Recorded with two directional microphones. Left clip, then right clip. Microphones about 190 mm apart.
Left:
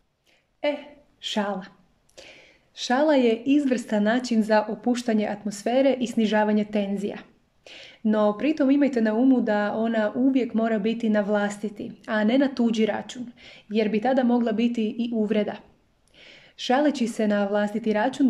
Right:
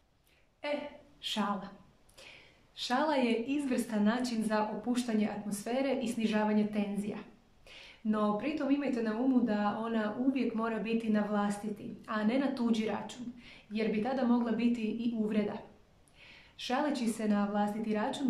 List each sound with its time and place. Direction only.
0.6 s a woman's voice: 35° left (ahead or behind)
2.7 s a woman's voice: 40° left (ahead or behind)